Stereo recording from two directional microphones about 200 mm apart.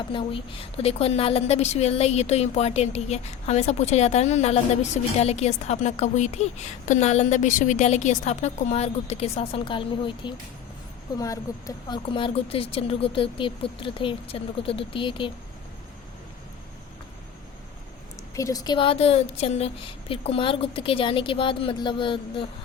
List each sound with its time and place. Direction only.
0.1 s a woman's voice: 25° left (ahead or behind)
18.3 s speech: 15° left (ahead or behind)